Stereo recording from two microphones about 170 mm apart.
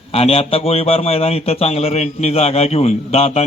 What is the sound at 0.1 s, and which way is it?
A man's voice, 35° left (ahead or behind).